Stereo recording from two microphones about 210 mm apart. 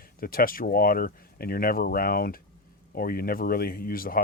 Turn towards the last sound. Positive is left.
turn(degrees=45)  # may be behind; listen again after turning